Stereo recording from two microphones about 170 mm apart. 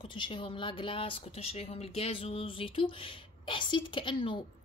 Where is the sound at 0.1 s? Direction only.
30° left (ahead or behind).